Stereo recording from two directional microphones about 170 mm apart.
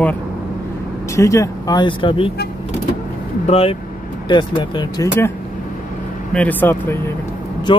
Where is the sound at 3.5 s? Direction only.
35° left (ahead or behind).